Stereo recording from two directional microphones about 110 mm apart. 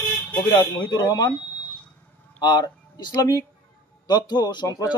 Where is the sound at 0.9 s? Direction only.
35° left (ahead or behind).